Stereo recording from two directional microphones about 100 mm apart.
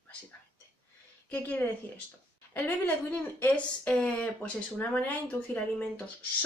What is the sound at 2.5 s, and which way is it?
Speech, 15° left (ahead or behind).